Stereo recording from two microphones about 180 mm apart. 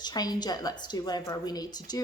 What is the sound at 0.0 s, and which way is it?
A woman's voice, 20° left (ahead or behind).